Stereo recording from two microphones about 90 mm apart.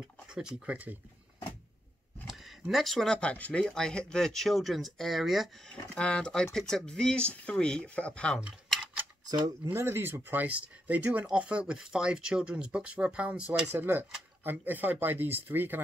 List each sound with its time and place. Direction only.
0.3 s speech: 10° right (ahead or behind)
2.2 s a sound: centre (ahead or behind)
2.7 s speech: centre (ahead or behind)
5.7 s speech: 10° left (ahead or behind)
8.4 s a sound: 15° right (ahead or behind)
9.7 s speech: 30° right (ahead or behind)